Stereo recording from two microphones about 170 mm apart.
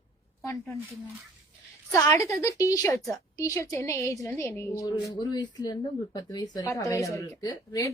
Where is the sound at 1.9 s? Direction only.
20° left (ahead or behind).